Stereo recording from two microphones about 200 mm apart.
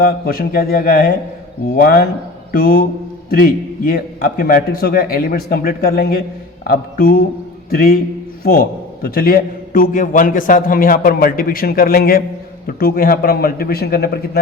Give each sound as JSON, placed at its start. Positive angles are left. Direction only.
{"t": 0.0, "sound": "a man's voice", "side_deg": 45}